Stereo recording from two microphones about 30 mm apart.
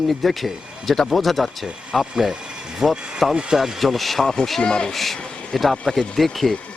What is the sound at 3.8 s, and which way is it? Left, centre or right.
Speech, centre.